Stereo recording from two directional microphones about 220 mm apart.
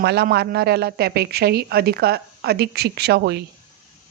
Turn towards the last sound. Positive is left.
turn(degrees=-50)  # may be behind; listen again after turning